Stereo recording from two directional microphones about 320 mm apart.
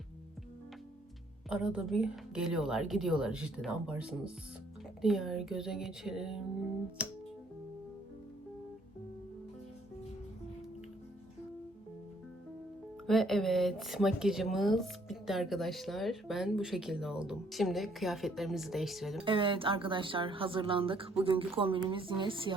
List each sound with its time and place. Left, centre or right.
1.5 s speech: centre
13.1 s speech: centre
19.2 s speech: centre